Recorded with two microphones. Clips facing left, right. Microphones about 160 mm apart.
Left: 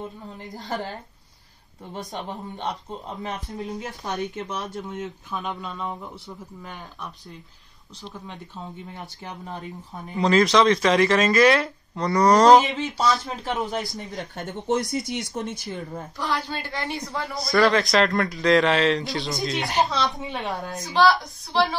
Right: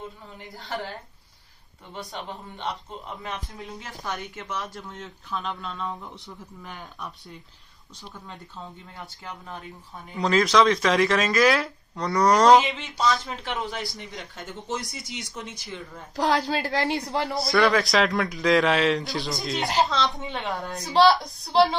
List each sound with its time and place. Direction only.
2.1 s speech: 45° left (ahead or behind)
3.1 s speech: 25° left (ahead or behind); by 8.4 s centre (ahead or behind)
9.2 s speech: 25° left (ahead or behind)
10.1 s speech: centre (ahead or behind)
12.7 s speech: 40° left (ahead or behind)
16.2 s a woman's voice: 90° right
17.4 s speech: centre (ahead or behind)
21.1 s a woman's voice: 25° right (ahead or behind)